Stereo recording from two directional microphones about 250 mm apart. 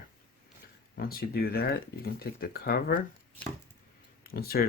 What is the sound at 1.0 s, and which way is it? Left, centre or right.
Speech, left.